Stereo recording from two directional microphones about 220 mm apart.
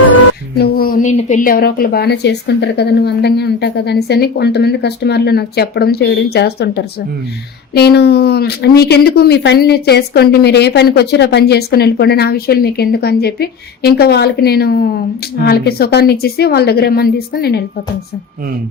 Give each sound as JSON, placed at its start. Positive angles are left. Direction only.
{"t": 0.6, "sound": "speech", "side_deg": 45}